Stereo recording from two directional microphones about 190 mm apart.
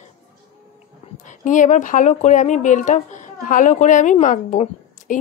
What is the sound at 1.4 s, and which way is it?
Speech, 40° left (ahead or behind).